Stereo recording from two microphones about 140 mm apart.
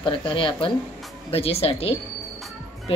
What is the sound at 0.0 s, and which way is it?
A woman's voice, 35° left (ahead or behind).